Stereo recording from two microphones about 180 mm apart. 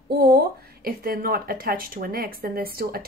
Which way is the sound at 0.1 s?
55° right (ahead or behind).